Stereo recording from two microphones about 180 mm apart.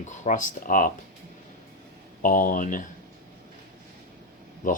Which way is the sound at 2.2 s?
45° left (ahead or behind).